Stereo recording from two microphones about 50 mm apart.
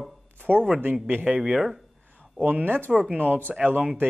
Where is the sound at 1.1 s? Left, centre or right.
Right.